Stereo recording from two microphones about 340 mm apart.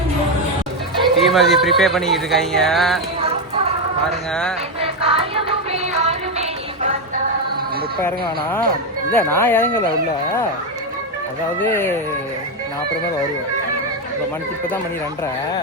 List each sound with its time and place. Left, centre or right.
1.0 s speech: centre
3.2 s chicken: centre
4.8 s music: centre
9.1 s speech: centre
11.6 s speech: centre